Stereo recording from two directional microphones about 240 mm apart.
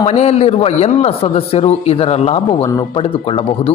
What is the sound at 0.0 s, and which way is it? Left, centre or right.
A man's voice, left.